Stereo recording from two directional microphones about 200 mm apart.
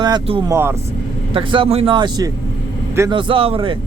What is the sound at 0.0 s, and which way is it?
Speech, 25° right (ahead or behind).